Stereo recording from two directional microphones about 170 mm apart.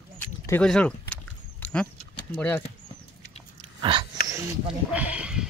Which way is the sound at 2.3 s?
10° left (ahead or behind).